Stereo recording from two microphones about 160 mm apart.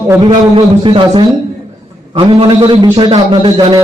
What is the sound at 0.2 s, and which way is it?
A man's voice, 35° right (ahead or behind).